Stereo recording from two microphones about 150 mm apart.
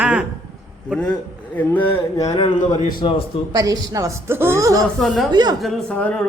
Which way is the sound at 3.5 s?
25° right (ahead or behind).